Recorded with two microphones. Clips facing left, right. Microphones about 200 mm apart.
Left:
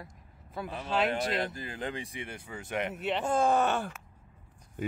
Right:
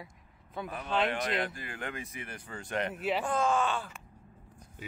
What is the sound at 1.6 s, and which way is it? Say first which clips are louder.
Speech: left 3 dB; 25° left (ahead or behind).